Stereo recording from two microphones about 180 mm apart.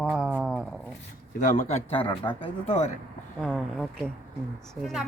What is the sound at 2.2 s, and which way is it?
Speech, 10° left (ahead or behind).